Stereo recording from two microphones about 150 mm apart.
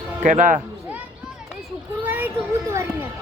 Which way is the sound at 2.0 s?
10° right (ahead or behind).